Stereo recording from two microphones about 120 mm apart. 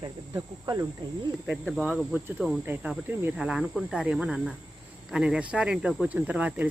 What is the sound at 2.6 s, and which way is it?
Speech, 15° right (ahead or behind).